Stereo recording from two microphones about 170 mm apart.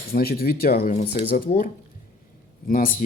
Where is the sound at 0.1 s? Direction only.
60° left (ahead or behind).